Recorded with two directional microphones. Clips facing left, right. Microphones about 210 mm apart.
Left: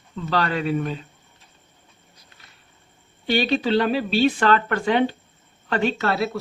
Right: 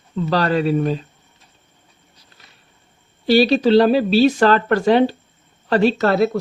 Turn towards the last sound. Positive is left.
turn(degrees=-45)  # may be behind; listen again after turning